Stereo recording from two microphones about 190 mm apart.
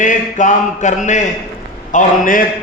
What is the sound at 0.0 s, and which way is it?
Mantra, 40° left (ahead or behind).